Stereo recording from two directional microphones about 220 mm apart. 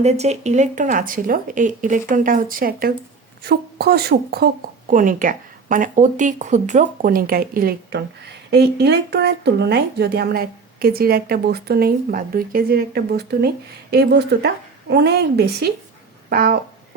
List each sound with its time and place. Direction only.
0.0 s speech: 30° right (ahead or behind)